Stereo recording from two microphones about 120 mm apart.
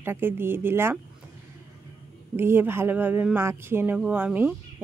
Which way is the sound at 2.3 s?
20° right (ahead or behind).